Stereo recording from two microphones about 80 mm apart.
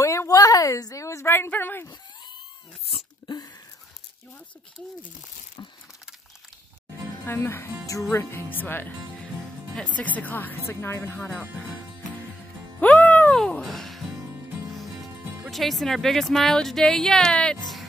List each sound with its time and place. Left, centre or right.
0.0 s a woman's voice: left
3.3 s a sound: left
5.6 s a sound: left
7.2 s a woman's voice: left
7.8 s a woman's voice: left
12.8 s speech: centre
13.7 s music: centre
15.5 s a woman's voice: centre